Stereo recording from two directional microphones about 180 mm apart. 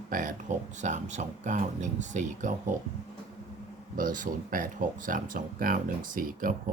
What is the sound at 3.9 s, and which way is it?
Speech, 50° right (ahead or behind).